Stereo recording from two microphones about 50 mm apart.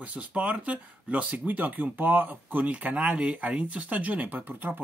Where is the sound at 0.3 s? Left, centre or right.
Right.